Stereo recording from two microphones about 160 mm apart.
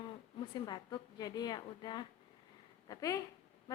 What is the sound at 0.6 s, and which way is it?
A woman's voice, 25° left (ahead or behind).